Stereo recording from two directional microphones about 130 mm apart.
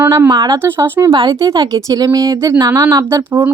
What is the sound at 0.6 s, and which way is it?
Speech, 15° right (ahead or behind).